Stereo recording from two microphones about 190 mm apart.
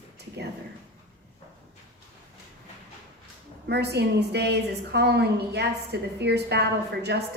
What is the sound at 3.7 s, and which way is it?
A woman's voice, 60° right (ahead or behind).